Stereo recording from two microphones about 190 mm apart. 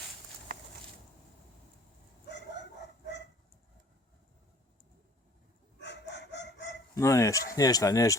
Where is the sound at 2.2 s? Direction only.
65° left (ahead or behind).